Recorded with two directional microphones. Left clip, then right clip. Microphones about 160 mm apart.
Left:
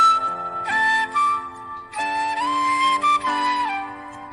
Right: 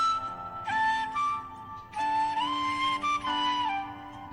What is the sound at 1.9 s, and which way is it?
Music, 50° left (ahead or behind).